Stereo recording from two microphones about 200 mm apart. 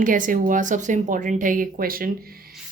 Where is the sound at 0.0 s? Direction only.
40° right (ahead or behind).